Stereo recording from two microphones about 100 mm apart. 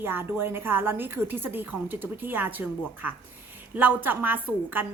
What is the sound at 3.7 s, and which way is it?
A woman's voice, 20° right (ahead or behind).